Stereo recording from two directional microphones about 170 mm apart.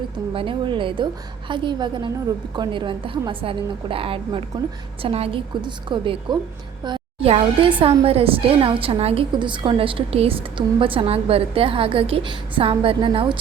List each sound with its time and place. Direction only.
0.3 s a woman's voice: 30° right (ahead or behind)